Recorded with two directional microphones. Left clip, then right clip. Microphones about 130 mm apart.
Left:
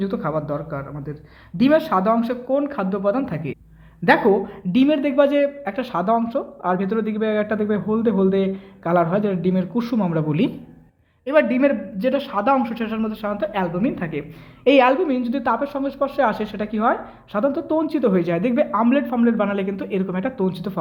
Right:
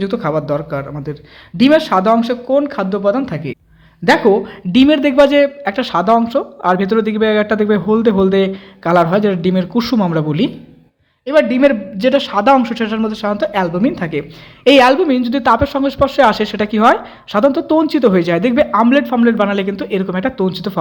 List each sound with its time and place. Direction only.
0.0 s a man's voice: 30° right (ahead or behind)
14.6 s speech: 20° right (ahead or behind)